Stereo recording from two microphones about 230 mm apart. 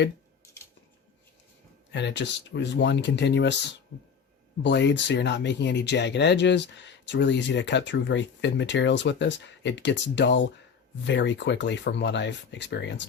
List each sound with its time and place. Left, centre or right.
1.9 s speech: left
4.6 s speech: left